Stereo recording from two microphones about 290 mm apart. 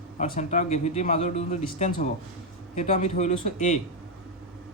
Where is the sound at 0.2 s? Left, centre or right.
Left.